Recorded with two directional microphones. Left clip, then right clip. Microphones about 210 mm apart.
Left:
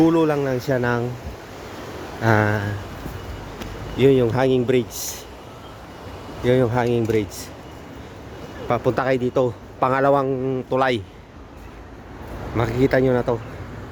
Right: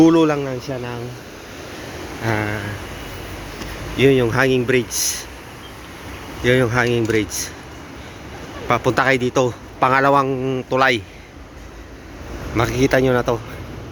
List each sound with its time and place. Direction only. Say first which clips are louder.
0.0 s a man's voice: right 4 dB; 5° left (ahead or behind)
0.4 s speech: left 5 dB; 30° left (ahead or behind)
2.2 s speech: left 4 dB; 25° left (ahead or behind)
3.9 s a man's voice: right 2 dB; 10° left (ahead or behind)
6.4 s a man's voice: right 2 dB; 5° left (ahead or behind)
8.6 s a man's voice: right 4 dB; 5° left (ahead or behind)
12.5 s a man's voice: right 2 dB; 15° left (ahead or behind)